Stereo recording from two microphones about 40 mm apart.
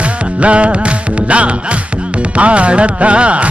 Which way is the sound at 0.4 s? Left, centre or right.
Right.